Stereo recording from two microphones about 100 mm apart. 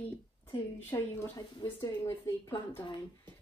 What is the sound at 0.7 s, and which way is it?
A woman's voice, 20° left (ahead or behind).